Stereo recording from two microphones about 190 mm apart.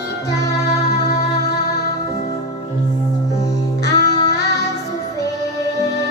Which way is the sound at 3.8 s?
60° left (ahead or behind).